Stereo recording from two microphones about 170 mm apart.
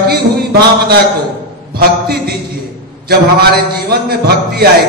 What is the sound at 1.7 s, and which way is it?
Speech, 65° right (ahead or behind).